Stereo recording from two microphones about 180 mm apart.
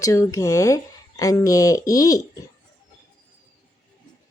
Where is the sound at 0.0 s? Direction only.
20° left (ahead or behind).